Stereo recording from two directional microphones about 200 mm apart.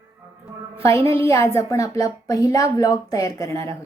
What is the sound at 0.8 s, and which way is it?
A woman's voice, 15° left (ahead or behind).